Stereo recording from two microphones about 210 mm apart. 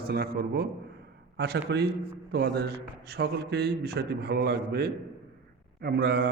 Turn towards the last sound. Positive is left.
turn(degrees=-50)  # may be behind; listen again after turning